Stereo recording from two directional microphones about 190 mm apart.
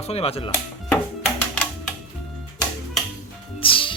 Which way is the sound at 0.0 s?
35° left (ahead or behind).